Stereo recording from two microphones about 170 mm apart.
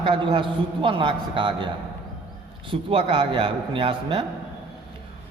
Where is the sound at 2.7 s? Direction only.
30° right (ahead or behind).